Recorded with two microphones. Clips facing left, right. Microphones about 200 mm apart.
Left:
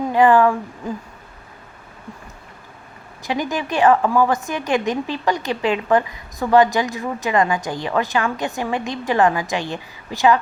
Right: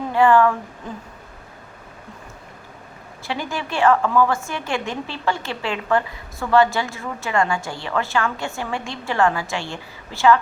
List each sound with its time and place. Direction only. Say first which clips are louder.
0.1 s a woman's voice: left 1 dB; 15° left (ahead or behind)
3.2 s a woman's voice: left 4 dB; 15° left (ahead or behind)